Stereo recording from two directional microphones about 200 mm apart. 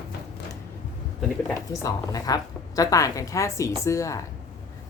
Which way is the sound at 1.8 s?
20° left (ahead or behind).